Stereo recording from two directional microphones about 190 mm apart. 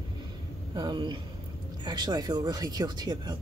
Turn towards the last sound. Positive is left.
turn(degrees=-20)  # may be behind; listen again after turning